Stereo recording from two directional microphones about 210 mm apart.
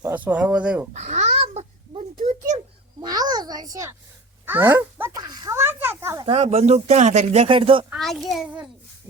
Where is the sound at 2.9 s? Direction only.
20° right (ahead or behind).